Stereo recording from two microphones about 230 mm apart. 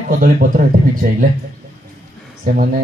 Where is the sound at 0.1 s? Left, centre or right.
Right.